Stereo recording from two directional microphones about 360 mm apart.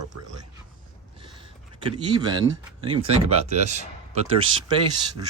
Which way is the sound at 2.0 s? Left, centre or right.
Centre.